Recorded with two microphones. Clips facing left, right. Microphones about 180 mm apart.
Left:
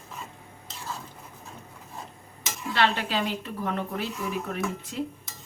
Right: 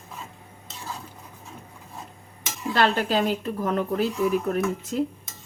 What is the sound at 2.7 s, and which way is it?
Speech, 45° right (ahead or behind).